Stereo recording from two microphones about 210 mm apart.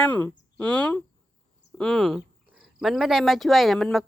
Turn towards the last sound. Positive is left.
turn(degrees=0)  # may be behind; listen again after turning